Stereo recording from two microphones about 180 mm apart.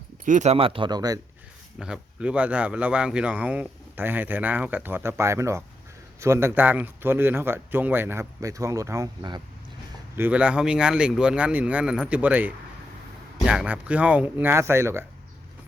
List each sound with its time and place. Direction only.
0.3 s speech: 40° right (ahead or behind); by 1.2 s 20° right (ahead or behind)
1.8 s speech: 5° right (ahead or behind); by 9.4 s 20° right (ahead or behind)
10.2 s speech: 10° right (ahead or behind)